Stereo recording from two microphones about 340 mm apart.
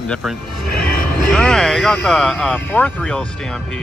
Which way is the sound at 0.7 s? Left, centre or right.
Left.